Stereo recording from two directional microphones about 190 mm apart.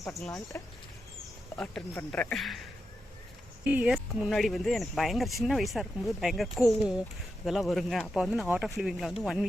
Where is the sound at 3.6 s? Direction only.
10° right (ahead or behind).